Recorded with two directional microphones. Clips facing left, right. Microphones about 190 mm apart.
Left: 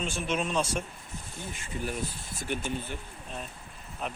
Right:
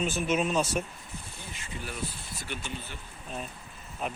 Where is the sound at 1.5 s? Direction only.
45° left (ahead or behind).